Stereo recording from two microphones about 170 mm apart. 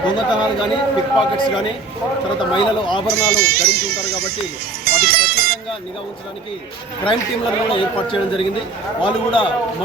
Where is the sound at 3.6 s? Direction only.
65° right (ahead or behind).